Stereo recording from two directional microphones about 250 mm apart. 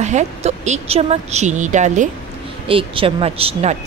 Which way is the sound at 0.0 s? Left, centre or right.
Right.